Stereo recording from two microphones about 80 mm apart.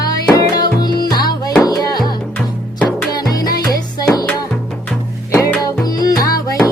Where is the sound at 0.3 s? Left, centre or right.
Left.